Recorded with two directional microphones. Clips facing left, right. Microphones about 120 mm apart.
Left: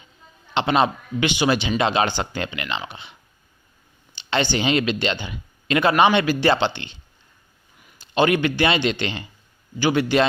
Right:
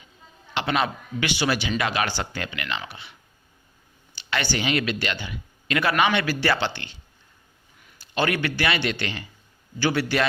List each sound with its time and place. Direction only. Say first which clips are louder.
0.5 s speech: left 5 dB; 25° left (ahead or behind)